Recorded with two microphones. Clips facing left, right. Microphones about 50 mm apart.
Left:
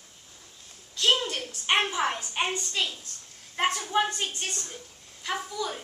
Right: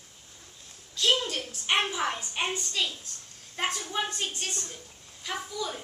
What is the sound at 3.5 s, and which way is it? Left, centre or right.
Speech, centre.